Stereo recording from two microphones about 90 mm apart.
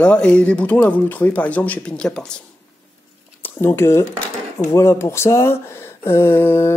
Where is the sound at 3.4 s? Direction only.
25° left (ahead or behind).